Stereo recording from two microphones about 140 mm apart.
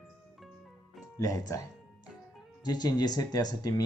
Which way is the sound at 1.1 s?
25° left (ahead or behind).